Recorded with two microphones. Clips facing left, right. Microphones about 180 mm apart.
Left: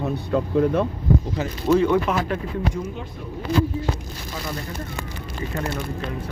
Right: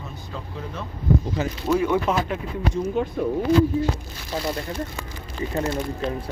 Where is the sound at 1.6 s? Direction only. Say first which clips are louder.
Left 4 dB; centre (ahead or behind).